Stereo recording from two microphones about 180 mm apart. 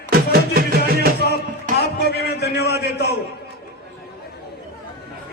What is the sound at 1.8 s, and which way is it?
A man's voice, 65° left (ahead or behind).